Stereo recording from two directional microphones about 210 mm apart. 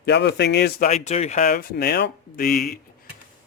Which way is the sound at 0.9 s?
30° left (ahead or behind).